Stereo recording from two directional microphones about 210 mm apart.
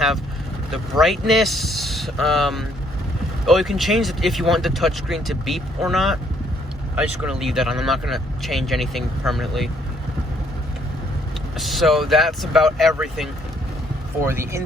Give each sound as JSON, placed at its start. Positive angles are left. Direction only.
{"t": 0.7, "sound": "speech", "side_deg": 0}
{"t": 11.5, "sound": "speech", "side_deg": 0}
{"t": 14.3, "sound": "speech", "side_deg": -10}